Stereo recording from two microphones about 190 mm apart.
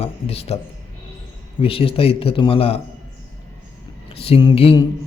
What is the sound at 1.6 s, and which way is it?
A man's voice, 30° left (ahead or behind).